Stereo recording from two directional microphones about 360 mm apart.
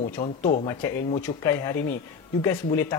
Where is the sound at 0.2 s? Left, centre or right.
Centre.